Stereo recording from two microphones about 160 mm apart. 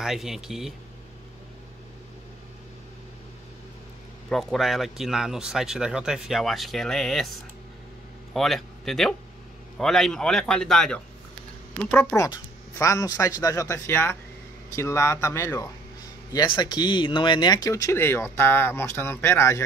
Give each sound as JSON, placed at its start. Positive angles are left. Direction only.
{"t": 0.0, "sound": "speech", "side_deg": 0}
{"t": 4.3, "sound": "speech", "side_deg": 0}